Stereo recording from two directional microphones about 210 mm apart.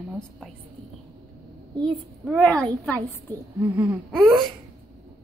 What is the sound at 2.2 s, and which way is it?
A woman's voice, 5° left (ahead or behind).